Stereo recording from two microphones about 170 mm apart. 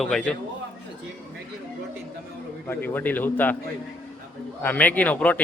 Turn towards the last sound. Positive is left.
turn(degrees=10)  # may be behind; listen again after turning